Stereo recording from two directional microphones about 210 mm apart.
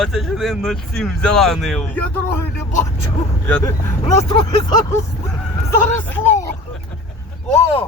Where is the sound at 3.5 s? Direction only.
15° left (ahead or behind).